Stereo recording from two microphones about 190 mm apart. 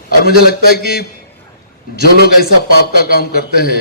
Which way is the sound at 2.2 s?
55° left (ahead or behind).